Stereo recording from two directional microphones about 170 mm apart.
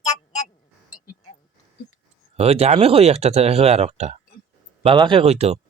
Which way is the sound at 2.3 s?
35° right (ahead or behind).